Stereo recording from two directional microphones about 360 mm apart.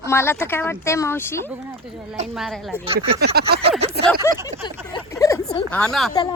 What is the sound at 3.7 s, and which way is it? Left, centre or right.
Speech, centre.